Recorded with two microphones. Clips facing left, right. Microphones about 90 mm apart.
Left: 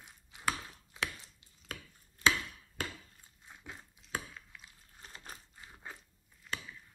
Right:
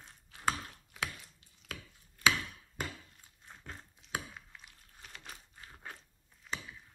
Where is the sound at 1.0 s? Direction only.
25° left (ahead or behind).